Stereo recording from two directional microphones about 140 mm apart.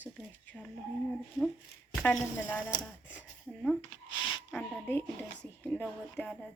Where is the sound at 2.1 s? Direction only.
15° left (ahead or behind).